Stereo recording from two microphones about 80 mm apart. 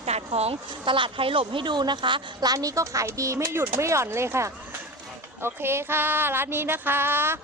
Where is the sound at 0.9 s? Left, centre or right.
Right.